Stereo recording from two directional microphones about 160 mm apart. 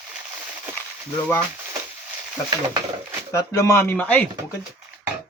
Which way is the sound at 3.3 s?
20° left (ahead or behind).